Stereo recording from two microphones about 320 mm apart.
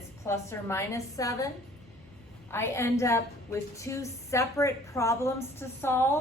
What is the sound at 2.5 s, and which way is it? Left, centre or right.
A woman's voice, centre.